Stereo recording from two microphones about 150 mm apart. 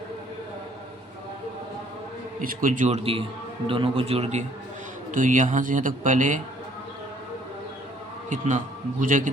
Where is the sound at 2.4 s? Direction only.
65° right (ahead or behind).